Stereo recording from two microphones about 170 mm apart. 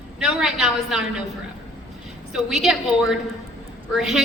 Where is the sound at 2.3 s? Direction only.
Centre (ahead or behind).